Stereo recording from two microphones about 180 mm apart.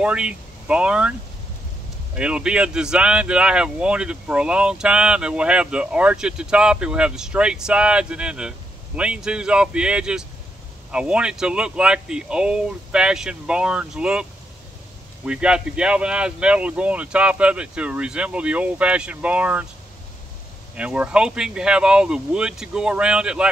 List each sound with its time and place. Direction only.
0.0 s speech: 5° right (ahead or behind)
2.1 s speech: 5° right (ahead or behind)
15.2 s speech: 5° right (ahead or behind)
20.7 s speech: 5° right (ahead or behind)